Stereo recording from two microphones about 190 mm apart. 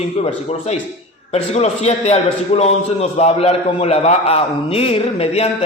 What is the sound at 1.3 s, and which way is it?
A man's voice, 35° left (ahead or behind).